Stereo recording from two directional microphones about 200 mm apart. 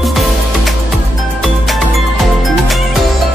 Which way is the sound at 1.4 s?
Centre (ahead or behind).